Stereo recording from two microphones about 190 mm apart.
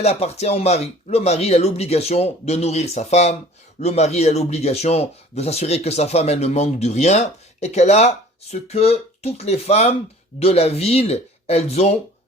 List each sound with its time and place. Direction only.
0.0 s speech: 35° left (ahead or behind)